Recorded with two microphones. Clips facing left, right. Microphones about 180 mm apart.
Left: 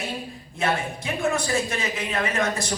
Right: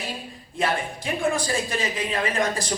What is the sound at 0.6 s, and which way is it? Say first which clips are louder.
A woman's voice: even; 30° right (ahead or behind).